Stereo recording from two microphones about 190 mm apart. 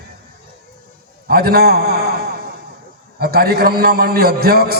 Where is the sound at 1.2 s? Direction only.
55° right (ahead or behind).